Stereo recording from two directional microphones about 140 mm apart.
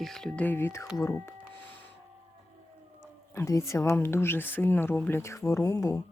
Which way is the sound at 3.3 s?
20° left (ahead or behind).